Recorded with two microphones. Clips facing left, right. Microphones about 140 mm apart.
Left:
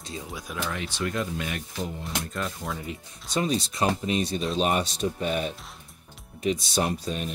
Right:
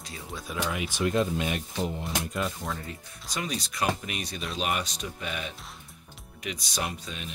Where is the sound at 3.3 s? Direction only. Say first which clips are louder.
Left 7 dB; 30° left (ahead or behind).